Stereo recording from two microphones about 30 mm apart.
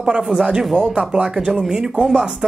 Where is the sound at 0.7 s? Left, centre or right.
Centre.